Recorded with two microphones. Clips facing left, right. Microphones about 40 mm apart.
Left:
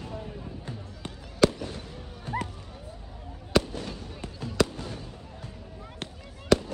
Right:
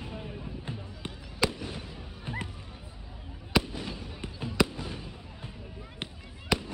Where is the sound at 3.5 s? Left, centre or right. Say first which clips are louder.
Left 3 dB; centre.